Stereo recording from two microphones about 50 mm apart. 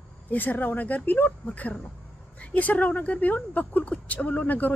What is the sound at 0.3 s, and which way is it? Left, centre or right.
Speech, left.